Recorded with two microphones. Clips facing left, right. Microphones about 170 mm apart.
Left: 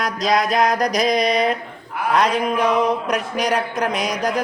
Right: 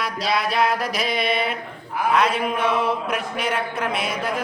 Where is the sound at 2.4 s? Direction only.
40° left (ahead or behind).